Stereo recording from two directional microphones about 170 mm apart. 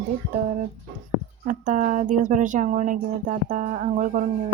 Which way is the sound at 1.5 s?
50° right (ahead or behind).